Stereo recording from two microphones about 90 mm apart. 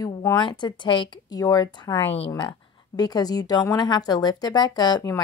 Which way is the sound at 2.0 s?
90° left.